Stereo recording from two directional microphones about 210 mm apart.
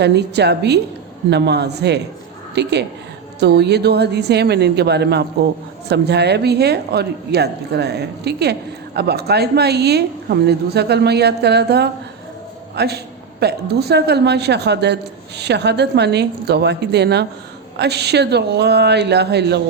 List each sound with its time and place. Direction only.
0.0 s a woman's voice: 55° right (ahead or behind)